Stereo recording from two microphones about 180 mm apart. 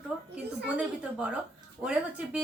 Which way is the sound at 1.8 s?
5° right (ahead or behind).